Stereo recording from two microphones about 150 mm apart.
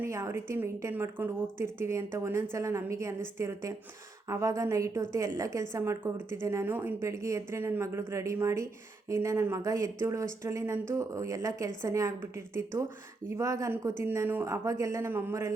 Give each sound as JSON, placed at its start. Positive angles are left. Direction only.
{"t": 0.0, "sound": "a woman's voice", "side_deg": -20}